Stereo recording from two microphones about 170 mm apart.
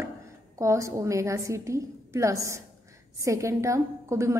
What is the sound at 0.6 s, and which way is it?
A woman's voice, 20° right (ahead or behind).